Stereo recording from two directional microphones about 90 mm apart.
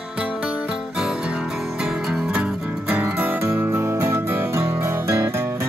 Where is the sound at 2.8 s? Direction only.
20° right (ahead or behind).